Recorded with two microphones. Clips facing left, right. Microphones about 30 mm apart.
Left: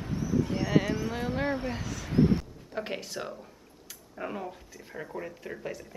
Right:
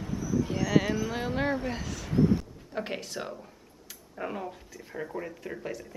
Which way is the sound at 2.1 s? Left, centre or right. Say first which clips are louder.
Even; left.